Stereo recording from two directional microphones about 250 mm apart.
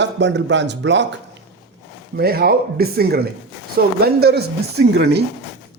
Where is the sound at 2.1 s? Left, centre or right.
Right.